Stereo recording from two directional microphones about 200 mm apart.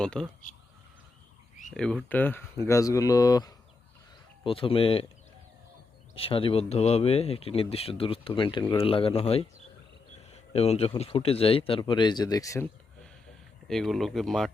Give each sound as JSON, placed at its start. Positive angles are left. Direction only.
{"t": 0.0, "sound": "speech", "side_deg": 5}
{"t": 1.7, "sound": "speech", "side_deg": 5}
{"t": 6.1, "sound": "speech", "side_deg": 30}
{"t": 13.7, "sound": "speech", "side_deg": 0}